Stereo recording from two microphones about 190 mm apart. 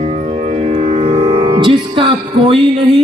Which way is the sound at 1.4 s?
25° right (ahead or behind).